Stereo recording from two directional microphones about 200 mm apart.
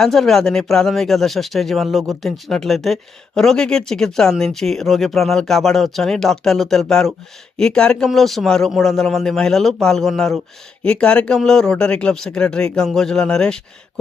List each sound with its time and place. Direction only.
0.0 s speech: centre (ahead or behind)